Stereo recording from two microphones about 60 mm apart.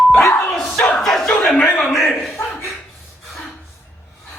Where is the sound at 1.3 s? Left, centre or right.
Centre.